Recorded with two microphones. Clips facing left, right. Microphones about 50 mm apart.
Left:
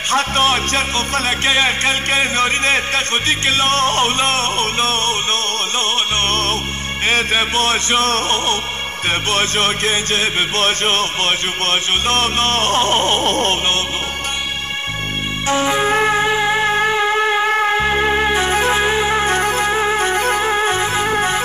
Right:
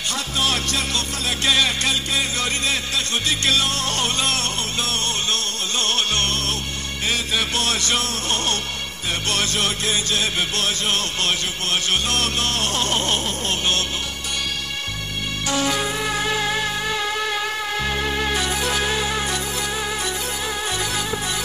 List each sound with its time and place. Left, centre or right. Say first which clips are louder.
0.1 s music: left 9 dB; left
9.3 s music: left 4 dB; left
13.3 s music: left 8 dB; left
15.4 s music: left 6 dB; left
15.9 s shofar: left 8 dB; left
21.1 s music: left 9 dB; left